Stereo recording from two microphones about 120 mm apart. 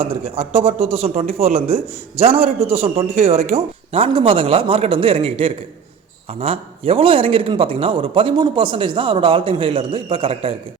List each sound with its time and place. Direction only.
0.0 s a man's voice: 55° right (ahead or behind)